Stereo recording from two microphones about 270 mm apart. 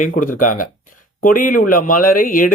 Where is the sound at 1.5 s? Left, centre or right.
Left.